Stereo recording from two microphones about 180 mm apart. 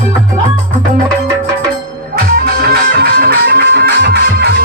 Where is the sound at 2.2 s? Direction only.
55° right (ahead or behind).